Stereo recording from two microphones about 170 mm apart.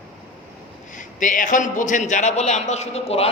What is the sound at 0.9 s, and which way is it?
A man's voice, 50° left (ahead or behind).